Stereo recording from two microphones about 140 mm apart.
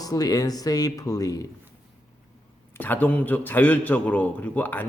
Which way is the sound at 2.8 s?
10° left (ahead or behind).